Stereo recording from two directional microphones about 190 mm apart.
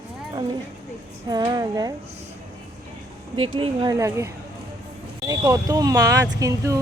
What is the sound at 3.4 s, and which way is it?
Speech, 25° right (ahead or behind).